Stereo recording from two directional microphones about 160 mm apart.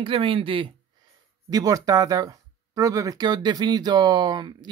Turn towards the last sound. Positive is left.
turn(degrees=-25)  # may be behind; listen again after turning